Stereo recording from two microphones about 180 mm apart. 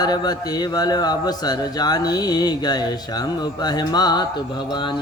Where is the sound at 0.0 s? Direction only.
20° left (ahead or behind).